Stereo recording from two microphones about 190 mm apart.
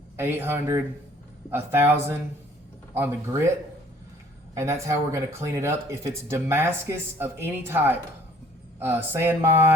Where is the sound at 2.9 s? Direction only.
10° right (ahead or behind).